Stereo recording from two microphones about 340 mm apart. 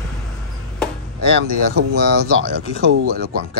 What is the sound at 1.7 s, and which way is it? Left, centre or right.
Speech, right.